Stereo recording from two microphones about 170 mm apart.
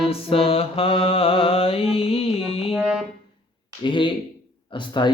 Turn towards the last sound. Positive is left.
turn(degrees=25)  # may be behind; listen again after turning